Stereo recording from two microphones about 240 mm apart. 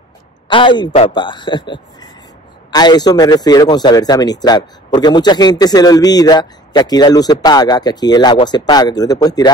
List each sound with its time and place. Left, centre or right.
0.5 s a man's voice: centre